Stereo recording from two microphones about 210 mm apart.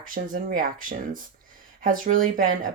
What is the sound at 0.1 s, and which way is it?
Speech, 40° right (ahead or behind).